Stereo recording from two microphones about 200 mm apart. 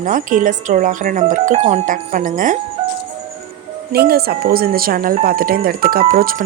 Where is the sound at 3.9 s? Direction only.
50° right (ahead or behind).